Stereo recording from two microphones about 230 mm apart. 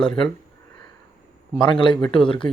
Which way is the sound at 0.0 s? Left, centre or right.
Centre.